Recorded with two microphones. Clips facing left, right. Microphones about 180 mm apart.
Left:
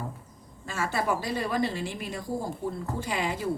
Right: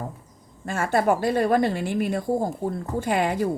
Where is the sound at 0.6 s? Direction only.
55° right (ahead or behind).